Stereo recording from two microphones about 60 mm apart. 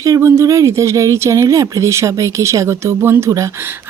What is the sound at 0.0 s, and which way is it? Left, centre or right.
Speech, right.